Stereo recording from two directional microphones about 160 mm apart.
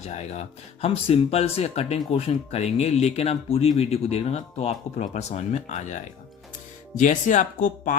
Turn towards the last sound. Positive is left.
turn(degrees=55)  # may be behind; listen again after turning